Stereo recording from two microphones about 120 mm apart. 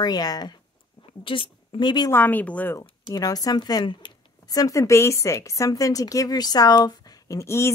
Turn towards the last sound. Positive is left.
turn(degrees=20)  # may be behind; listen again after turning